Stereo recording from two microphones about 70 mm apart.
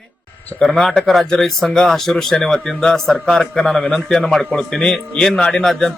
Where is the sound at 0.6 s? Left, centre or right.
Centre.